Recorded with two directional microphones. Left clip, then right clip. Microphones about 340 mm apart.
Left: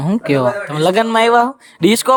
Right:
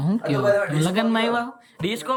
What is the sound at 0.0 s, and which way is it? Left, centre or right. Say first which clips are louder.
Speech: left 7 dB; centre.